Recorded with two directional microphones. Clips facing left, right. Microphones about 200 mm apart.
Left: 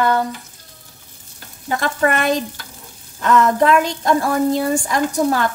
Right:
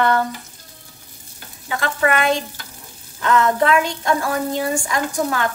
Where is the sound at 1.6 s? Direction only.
40° left (ahead or behind).